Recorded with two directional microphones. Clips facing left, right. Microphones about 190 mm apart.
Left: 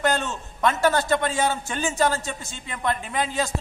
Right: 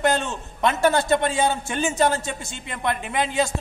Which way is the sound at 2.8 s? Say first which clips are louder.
Right 1 dB; 20° right (ahead or behind).